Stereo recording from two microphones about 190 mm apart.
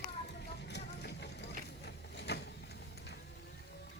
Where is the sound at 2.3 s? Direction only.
60° left (ahead or behind).